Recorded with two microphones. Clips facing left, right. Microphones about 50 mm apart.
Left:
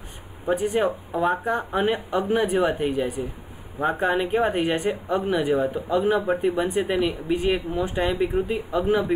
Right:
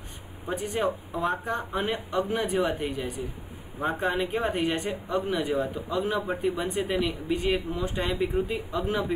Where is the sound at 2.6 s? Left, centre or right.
Left.